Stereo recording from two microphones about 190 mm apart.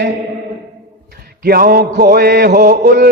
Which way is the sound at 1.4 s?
50° right (ahead or behind).